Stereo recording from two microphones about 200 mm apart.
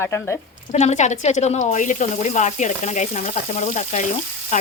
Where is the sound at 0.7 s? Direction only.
35° left (ahead or behind).